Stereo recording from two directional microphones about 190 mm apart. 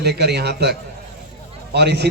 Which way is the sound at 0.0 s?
60° right (ahead or behind).